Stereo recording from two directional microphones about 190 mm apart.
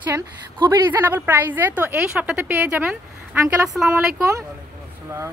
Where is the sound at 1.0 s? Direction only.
10° right (ahead or behind).